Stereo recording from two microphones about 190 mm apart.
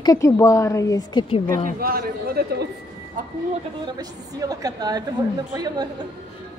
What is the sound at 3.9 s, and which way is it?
A woman's voice, 20° right (ahead or behind).